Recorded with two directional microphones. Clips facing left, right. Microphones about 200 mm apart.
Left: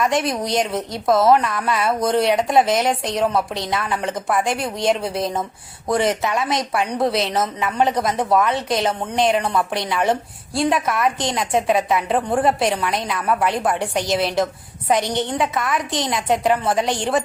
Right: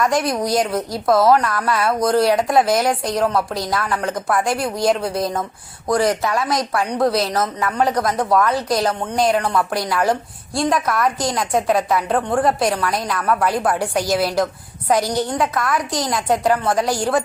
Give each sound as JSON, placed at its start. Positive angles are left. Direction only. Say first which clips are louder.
{"t": 0.0, "sound": "a woman's voice", "louder": "right 2 dB", "side_deg": 0}
{"t": 7.2, "sound": "a woman's voice", "louder": "right 1 dB", "side_deg": 25}
{"t": 7.8, "sound": "a woman's voice", "louder": "even", "side_deg": 0}